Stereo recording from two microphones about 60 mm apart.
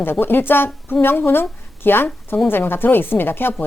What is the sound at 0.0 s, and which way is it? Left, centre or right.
A woman's voice, left.